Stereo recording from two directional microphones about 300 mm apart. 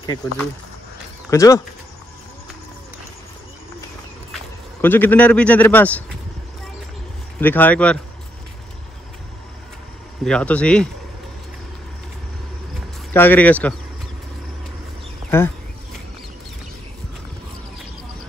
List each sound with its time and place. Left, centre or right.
0.0 s speech: centre
4.8 s a man's voice: centre
7.3 s a man's voice: centre
10.2 s a man's voice: centre
13.1 s a man's voice: centre